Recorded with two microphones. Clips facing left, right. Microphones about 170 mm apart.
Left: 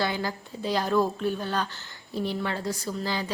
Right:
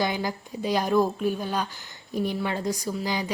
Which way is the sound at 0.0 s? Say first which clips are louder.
Right 2 dB; 15° right (ahead or behind).